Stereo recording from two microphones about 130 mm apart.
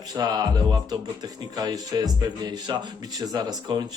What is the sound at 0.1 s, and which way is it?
A man's voice, 30° right (ahead or behind).